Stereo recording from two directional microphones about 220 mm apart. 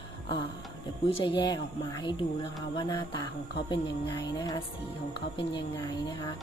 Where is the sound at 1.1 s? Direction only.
20° left (ahead or behind).